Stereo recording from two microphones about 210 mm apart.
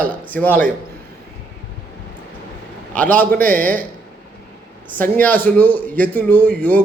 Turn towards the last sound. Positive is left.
turn(degrees=10)  # may be behind; listen again after turning